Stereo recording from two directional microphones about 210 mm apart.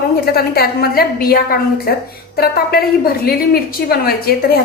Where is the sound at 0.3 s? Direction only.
45° left (ahead or behind).